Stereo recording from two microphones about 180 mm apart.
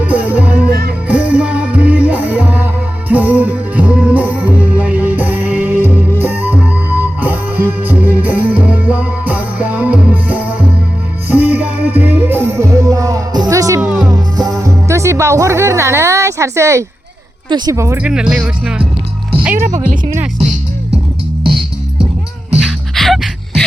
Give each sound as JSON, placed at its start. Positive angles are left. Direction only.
{"t": 0.0, "sound": "music", "side_deg": -10}
{"t": 17.5, "sound": "speech", "side_deg": -15}
{"t": 22.6, "sound": "music", "side_deg": 0}